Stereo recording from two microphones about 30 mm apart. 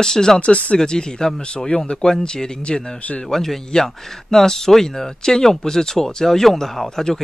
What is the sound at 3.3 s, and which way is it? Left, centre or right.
Speech, centre.